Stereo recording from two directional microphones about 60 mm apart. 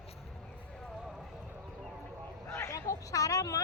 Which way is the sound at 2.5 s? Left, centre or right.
Left.